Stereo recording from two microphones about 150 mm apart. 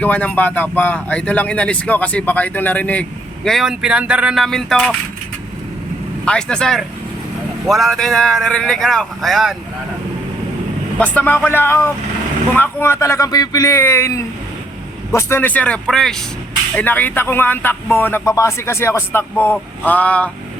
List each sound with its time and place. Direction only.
0.0 s speech: 10° left (ahead or behind)
6.2 s speech: 5° left (ahead or behind)
11.0 s speech: 10° left (ahead or behind)